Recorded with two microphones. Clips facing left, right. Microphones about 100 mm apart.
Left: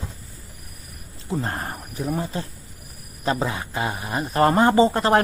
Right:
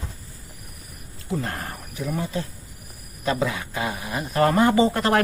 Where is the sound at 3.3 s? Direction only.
35° left (ahead or behind).